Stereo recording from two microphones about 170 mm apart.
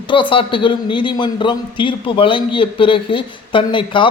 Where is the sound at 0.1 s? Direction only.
30° left (ahead or behind).